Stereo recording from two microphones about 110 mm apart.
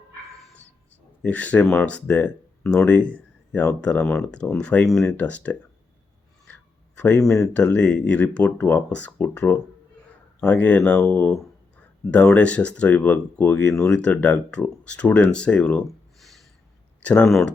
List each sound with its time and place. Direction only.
1.2 s speech: 15° left (ahead or behind)
6.5 s a sound: 15° left (ahead or behind)
7.5 s speech: 10° left (ahead or behind)
11.0 s speech: 25° left (ahead or behind)
12.1 s speech: 10° left (ahead or behind)